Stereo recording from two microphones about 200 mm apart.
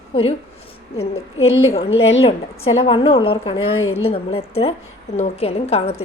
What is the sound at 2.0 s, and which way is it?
A woman's voice, 30° left (ahead or behind).